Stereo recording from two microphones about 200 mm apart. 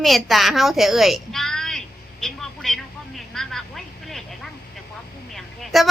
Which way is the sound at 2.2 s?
Centre (ahead or behind).